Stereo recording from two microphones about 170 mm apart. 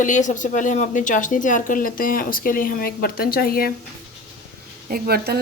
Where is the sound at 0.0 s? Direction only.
45° left (ahead or behind).